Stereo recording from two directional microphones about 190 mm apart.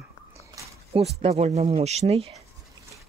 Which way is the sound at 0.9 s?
30° right (ahead or behind).